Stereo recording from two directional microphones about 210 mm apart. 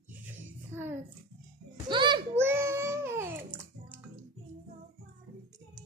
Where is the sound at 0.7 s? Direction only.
10° right (ahead or behind).